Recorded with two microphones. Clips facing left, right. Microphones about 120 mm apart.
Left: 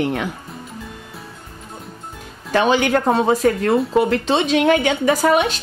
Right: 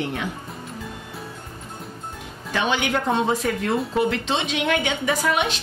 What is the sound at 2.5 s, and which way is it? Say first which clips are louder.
A child's voice: left 7 dB; 40° left (ahead or behind).